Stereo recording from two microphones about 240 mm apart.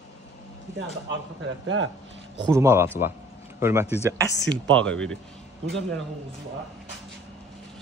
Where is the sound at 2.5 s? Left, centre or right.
Centre.